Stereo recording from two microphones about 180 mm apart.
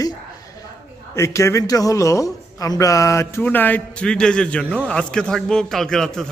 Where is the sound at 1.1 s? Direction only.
15° left (ahead or behind).